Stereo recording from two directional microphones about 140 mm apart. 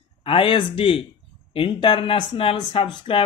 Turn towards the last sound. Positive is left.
turn(degrees=40)  # may be behind; listen again after turning